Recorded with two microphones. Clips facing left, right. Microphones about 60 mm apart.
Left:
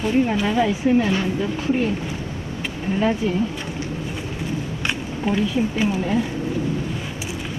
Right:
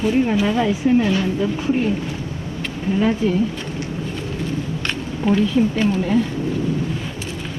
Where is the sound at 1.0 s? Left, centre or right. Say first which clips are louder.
Right 2 dB; left.